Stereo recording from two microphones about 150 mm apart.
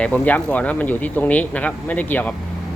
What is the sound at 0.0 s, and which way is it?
Speech, 10° left (ahead or behind).